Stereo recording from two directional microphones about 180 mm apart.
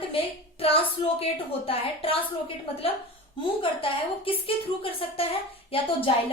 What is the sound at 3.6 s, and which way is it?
A woman's voice, 30° left (ahead or behind).